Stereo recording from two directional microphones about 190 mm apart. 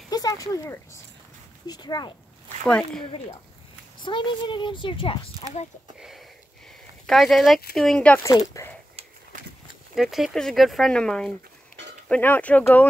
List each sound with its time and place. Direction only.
0.1 s a sound: 20° left (ahead or behind)
1.7 s speech: 20° left (ahead or behind)
2.6 s speech: 5° left (ahead or behind)
4.0 s speech: 25° left (ahead or behind)
5.9 s sniff: centre (ahead or behind)
7.1 s speech: centre (ahead or behind)
8.3 s speech: 20° left (ahead or behind)
9.9 s speech: centre (ahead or behind)